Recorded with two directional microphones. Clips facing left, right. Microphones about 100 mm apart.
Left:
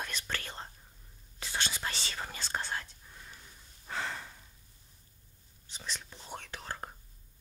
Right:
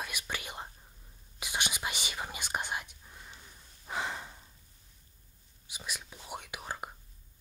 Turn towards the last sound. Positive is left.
turn(degrees=-10)  # may be behind; listen again after turning